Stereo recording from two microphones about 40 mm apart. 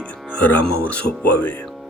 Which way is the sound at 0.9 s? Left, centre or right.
Left.